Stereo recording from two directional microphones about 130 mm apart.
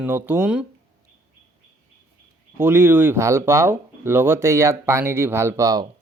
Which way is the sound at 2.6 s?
20° right (ahead or behind).